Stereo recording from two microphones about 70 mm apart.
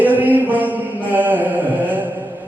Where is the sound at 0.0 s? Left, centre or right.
Right.